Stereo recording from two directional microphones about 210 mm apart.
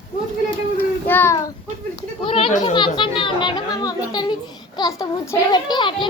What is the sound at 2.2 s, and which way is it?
A child's voice, 25° left (ahead or behind).